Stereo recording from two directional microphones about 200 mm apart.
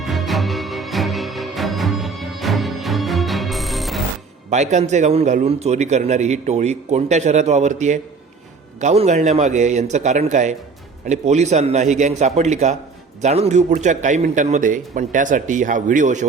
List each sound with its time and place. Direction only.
0.0 s music: centre (ahead or behind)
4.4 s a man's voice: 35° right (ahead or behind)